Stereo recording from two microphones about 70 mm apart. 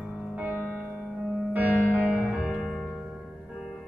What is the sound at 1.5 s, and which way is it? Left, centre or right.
Music, right.